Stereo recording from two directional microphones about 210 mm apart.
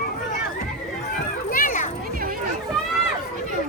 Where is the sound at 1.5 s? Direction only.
40° left (ahead or behind).